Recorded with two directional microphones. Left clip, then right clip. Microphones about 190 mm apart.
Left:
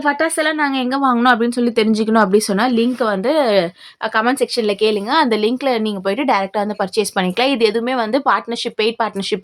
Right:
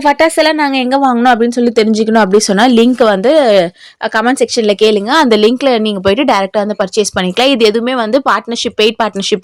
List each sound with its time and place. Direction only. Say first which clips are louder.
0.2 s a woman's voice: right 7 dB; 30° right (ahead or behind)